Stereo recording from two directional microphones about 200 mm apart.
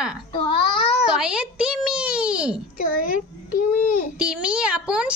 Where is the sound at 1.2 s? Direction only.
5° right (ahead or behind).